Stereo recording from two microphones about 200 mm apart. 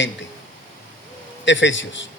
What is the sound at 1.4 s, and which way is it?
Speech, 65° left (ahead or behind).